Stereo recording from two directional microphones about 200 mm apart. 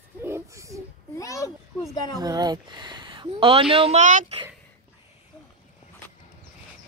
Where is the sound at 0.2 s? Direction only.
15° right (ahead or behind).